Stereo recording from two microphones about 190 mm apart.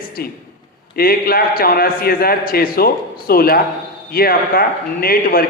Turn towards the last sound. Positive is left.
turn(degrees=50)  # may be behind; listen again after turning